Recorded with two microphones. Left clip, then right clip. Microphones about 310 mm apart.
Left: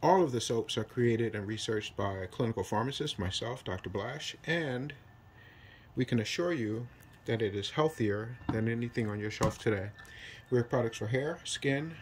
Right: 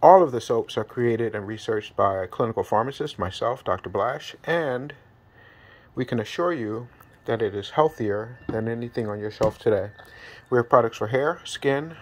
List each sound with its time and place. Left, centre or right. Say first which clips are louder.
0.0 s speech: right 13 dB; centre
5.9 s speech: right 6 dB; centre
10.1 s a sound: right 9 dB; right
11.2 s speech: right 10 dB; centre